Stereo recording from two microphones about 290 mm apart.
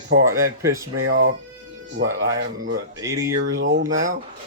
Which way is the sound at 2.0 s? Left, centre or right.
Right.